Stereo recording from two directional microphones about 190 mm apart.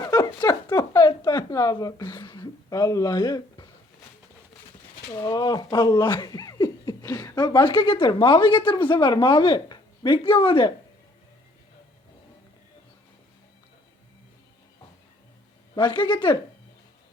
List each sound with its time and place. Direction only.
0.0 s a sound: 20° left (ahead or behind)
5.0 s speech: 20° left (ahead or behind)
15.7 s speech: 25° left (ahead or behind)